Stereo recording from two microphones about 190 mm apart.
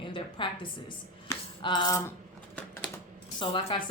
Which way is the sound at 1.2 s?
25° left (ahead or behind).